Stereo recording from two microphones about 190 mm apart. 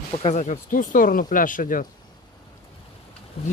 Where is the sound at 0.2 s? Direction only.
35° left (ahead or behind).